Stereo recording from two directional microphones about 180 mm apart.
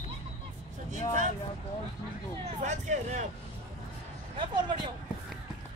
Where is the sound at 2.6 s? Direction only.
40° right (ahead or behind).